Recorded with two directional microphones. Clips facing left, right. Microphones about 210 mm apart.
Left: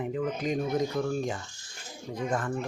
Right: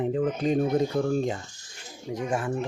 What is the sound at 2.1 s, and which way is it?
Speech, 15° right (ahead or behind).